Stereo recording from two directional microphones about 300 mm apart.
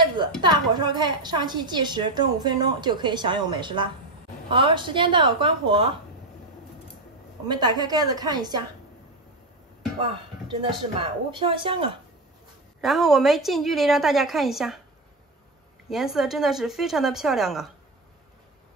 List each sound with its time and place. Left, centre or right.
0.0 s a woman's voice: centre
7.4 s a woman's voice: centre
11.0 s a woman's voice: centre
12.8 s a woman's voice: centre
15.9 s a woman's voice: centre